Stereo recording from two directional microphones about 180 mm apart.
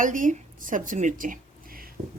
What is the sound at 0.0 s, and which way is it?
Speech, 45° right (ahead or behind).